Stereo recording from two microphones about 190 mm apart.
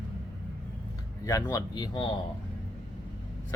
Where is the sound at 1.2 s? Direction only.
15° left (ahead or behind).